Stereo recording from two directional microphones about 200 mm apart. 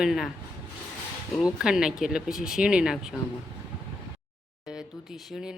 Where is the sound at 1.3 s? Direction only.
5° right (ahead or behind).